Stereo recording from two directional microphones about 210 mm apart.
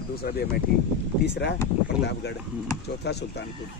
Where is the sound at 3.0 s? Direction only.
50° left (ahead or behind).